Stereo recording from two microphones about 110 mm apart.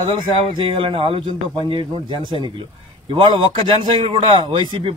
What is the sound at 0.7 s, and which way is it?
Speech, 55° right (ahead or behind).